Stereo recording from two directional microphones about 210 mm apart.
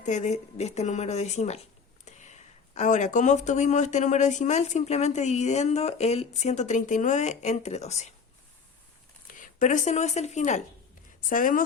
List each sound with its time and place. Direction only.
0.0 s speech: 35° left (ahead or behind)
9.2 s speech: 40° left (ahead or behind)